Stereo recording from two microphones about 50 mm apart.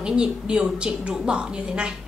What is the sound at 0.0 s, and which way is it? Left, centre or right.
A woman's voice, centre.